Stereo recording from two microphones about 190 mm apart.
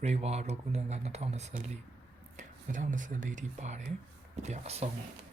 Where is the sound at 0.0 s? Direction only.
35° right (ahead or behind).